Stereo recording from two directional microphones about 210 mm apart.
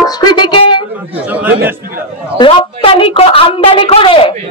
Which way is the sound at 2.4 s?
25° left (ahead or behind).